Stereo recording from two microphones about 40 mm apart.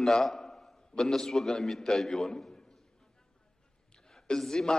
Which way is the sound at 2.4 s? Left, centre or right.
Centre.